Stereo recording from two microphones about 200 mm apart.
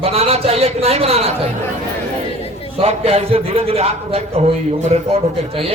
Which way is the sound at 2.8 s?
30° right (ahead or behind).